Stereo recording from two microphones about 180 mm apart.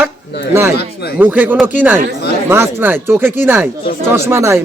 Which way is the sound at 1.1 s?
10° right (ahead or behind).